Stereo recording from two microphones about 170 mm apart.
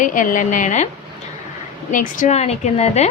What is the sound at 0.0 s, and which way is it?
Speech, 50° left (ahead or behind).